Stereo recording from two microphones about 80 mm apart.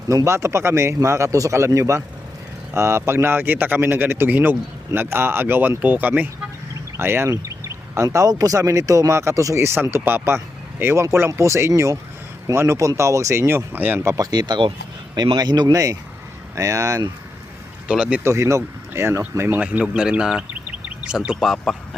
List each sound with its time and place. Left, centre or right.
0.3 s speech: right
13.5 s speech: right
14.2 s speech: right
17.8 s speech: centre
18.2 s speech: right
19.4 s speech: right
19.6 s speech: centre
21.3 s speech: centre